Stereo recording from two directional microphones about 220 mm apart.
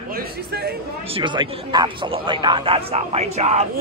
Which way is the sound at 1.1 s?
25° right (ahead or behind).